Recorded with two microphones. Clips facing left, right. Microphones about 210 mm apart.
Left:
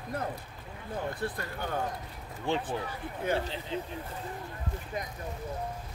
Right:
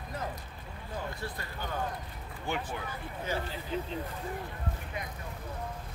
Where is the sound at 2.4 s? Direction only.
25° left (ahead or behind).